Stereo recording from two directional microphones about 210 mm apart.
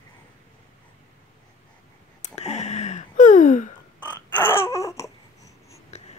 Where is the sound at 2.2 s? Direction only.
30° left (ahead or behind).